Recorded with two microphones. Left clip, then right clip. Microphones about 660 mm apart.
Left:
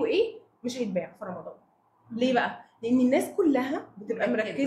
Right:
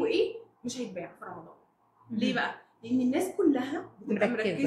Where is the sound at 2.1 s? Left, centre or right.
Left.